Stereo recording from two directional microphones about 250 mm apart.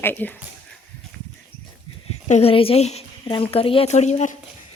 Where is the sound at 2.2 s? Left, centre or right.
Left.